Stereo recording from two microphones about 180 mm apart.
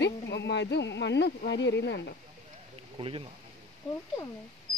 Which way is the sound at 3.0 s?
30° right (ahead or behind).